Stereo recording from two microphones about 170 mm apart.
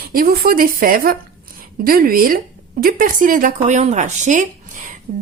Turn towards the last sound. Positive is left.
turn(degrees=-50)  # may be behind; listen again after turning